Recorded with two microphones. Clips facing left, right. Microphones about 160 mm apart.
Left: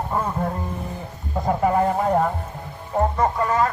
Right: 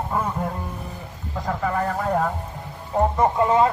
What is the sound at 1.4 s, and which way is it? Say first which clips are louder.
Speech: left 5 dB; 25° left (ahead or behind).